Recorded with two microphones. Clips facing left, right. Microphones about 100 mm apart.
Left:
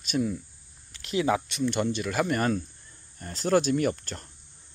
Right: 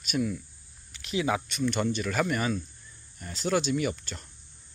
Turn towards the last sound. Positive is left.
turn(degrees=50)  # may be behind; listen again after turning